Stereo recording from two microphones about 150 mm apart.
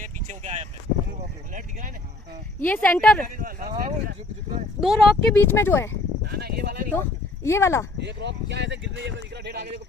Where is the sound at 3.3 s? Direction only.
70° right (ahead or behind).